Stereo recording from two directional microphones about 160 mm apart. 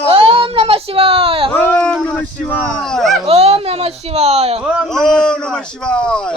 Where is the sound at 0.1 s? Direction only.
35° right (ahead or behind).